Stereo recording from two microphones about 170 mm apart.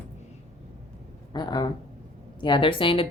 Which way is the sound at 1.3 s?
25° left (ahead or behind).